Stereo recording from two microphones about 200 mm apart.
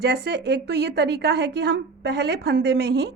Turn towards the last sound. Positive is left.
turn(degrees=-55)  # may be behind; listen again after turning